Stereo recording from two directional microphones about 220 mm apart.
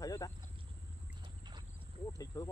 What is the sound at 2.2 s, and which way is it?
Speech, 15° left (ahead or behind).